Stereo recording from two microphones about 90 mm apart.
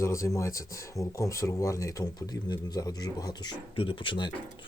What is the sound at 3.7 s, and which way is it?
Speech, 80° left.